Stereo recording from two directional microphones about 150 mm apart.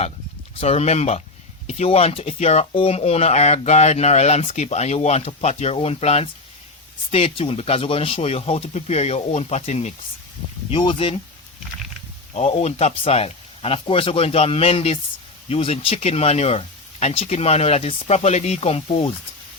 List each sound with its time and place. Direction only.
0.6 s speech: 45° left (ahead or behind)
12.3 s speech: 45° left (ahead or behind)